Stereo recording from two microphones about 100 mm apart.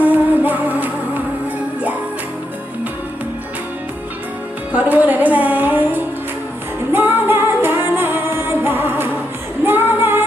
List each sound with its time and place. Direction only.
0.0 s music: 20° right (ahead or behind)
4.7 s music: 15° right (ahead or behind)
9.6 s female singing: 20° right (ahead or behind)